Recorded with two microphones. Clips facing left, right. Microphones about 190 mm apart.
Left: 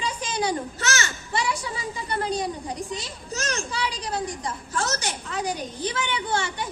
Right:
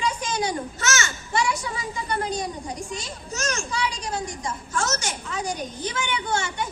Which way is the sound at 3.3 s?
35° left (ahead or behind).